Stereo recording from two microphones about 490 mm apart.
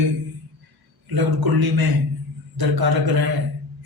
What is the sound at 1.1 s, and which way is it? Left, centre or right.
A man's voice, right.